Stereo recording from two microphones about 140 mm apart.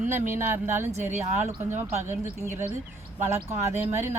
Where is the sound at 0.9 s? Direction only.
55° right (ahead or behind).